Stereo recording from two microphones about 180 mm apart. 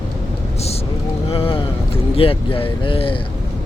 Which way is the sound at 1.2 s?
30° left (ahead or behind).